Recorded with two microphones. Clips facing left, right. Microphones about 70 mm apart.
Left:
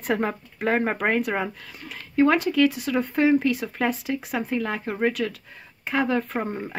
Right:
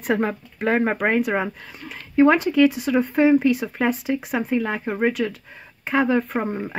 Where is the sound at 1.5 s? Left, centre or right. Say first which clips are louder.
Right 2 dB; right.